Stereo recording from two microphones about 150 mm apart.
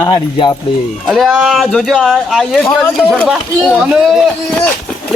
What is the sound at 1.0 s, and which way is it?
A man's voice, centre (ahead or behind).